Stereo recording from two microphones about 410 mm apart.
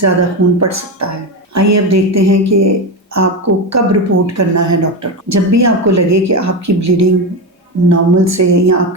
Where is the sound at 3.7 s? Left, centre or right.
Right.